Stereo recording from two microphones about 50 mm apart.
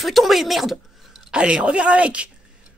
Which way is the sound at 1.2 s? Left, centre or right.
Centre.